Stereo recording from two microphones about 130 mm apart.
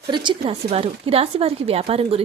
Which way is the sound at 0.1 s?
40° right (ahead or behind).